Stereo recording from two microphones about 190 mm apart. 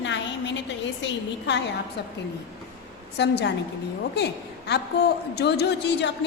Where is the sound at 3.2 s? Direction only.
65° left (ahead or behind).